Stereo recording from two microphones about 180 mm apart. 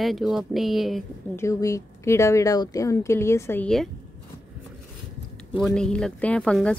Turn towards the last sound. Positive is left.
turn(degrees=5)  # may be behind; listen again after turning